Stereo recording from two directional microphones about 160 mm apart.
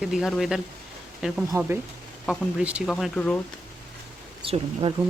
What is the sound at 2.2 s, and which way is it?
Speech, centre (ahead or behind).